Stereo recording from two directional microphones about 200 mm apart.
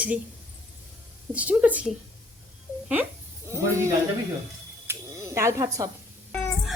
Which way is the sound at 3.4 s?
15° right (ahead or behind).